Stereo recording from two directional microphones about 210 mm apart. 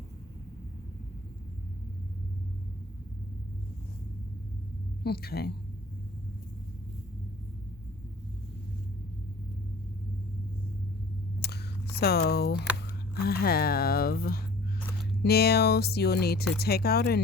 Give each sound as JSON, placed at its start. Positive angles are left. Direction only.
{"t": 5.0, "sound": "speech", "side_deg": 50}
{"t": 11.3, "sound": "a sound", "side_deg": 50}
{"t": 13.2, "sound": "speech", "side_deg": 45}